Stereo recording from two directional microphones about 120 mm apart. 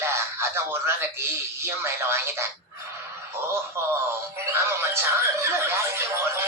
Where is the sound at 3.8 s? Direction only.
20° right (ahead or behind).